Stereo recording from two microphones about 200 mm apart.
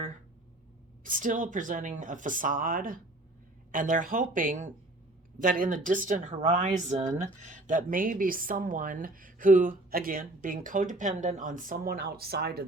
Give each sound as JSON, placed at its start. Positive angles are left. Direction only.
{"t": 1.0, "sound": "speech", "side_deg": -40}